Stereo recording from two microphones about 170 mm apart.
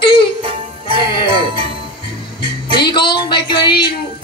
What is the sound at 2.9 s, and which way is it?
Speech, 25° left (ahead or behind).